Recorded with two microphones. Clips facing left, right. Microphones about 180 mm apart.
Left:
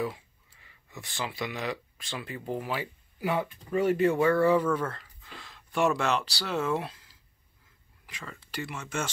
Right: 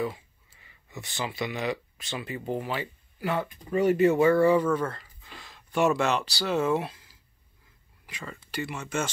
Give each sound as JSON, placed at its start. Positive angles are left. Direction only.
{"t": 0.0, "sound": "speech", "side_deg": 0}
{"t": 3.7, "sound": "speech", "side_deg": 0}
{"t": 8.1, "sound": "speech", "side_deg": 0}